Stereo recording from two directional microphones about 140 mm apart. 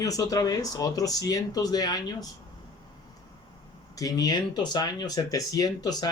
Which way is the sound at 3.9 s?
25° left (ahead or behind).